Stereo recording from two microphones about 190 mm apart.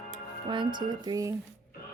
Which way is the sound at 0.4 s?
25° right (ahead or behind).